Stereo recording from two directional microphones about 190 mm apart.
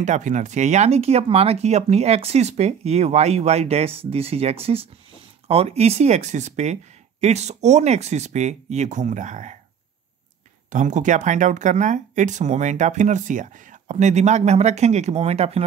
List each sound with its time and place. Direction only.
0.0 s speech: 40° right (ahead or behind)
10.7 s speech: 40° right (ahead or behind)